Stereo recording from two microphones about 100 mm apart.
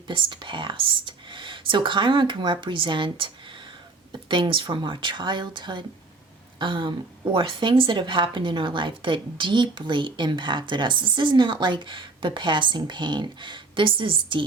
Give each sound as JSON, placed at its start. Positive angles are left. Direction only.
{"t": 0.1, "sound": "speech", "side_deg": -50}